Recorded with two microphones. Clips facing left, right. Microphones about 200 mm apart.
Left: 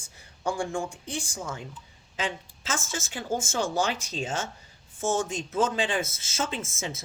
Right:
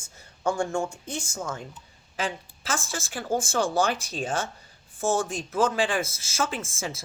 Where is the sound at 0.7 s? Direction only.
15° left (ahead or behind).